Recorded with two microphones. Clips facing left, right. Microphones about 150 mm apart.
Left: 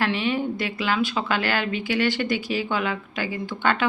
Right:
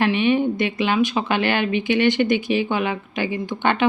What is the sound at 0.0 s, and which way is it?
A woman's voice, 20° right (ahead or behind).